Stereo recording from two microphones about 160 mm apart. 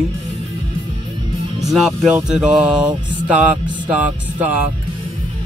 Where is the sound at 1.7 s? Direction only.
Centre (ahead or behind).